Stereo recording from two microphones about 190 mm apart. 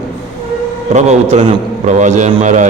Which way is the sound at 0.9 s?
35° right (ahead or behind).